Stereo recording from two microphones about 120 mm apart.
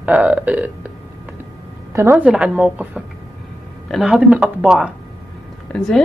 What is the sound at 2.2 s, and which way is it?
Speech, 10° right (ahead or behind).